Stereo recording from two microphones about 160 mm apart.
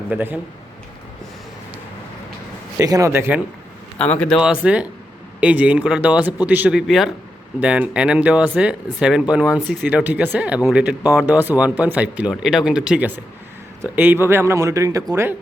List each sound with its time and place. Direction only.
0.1 s speech: 10° right (ahead or behind)
2.7 s speech: 20° right (ahead or behind)
3.9 s a man's voice: 5° left (ahead or behind)
4.4 s speech: 5° right (ahead or behind)